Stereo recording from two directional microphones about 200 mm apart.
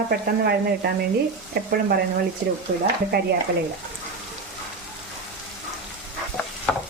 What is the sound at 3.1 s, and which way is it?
Speech, 50° right (ahead or behind).